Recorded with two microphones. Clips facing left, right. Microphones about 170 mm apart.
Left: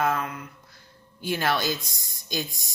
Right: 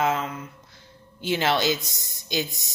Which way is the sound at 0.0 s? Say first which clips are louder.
Right 1 dB; 20° right (ahead or behind).